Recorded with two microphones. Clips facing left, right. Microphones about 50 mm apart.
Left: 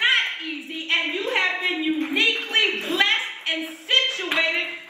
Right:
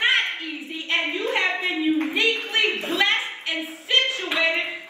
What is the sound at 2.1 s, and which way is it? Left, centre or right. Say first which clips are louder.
Speech: left 1 dB; left.